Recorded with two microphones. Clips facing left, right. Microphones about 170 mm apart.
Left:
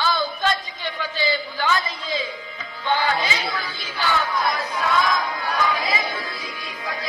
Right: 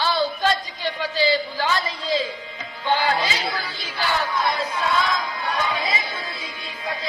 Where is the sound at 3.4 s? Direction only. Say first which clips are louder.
Even; 35° right (ahead or behind).